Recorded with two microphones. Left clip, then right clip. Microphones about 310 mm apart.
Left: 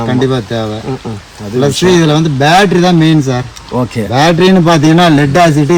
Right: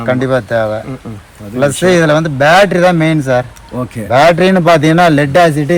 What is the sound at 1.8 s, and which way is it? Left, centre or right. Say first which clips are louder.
Speech: right 1 dB; centre.